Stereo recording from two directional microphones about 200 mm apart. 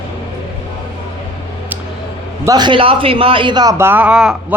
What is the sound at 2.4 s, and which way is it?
A man's voice, 20° right (ahead or behind).